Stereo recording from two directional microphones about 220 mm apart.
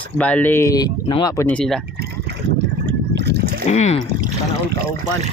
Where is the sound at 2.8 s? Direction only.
50° right (ahead or behind).